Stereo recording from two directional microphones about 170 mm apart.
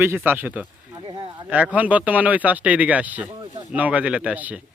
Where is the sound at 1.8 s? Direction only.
10° right (ahead or behind).